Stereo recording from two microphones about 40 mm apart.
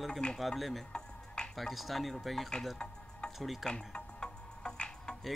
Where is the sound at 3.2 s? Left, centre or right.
Left.